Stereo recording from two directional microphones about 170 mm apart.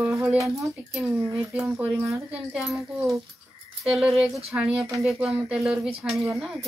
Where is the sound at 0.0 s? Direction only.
10° right (ahead or behind).